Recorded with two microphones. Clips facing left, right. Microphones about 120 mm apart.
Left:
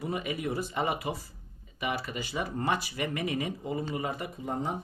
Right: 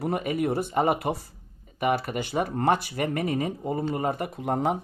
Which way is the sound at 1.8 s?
50° right (ahead or behind).